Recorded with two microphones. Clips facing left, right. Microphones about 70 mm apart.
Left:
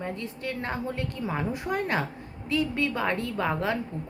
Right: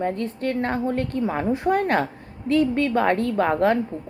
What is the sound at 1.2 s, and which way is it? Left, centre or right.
A woman's voice, right.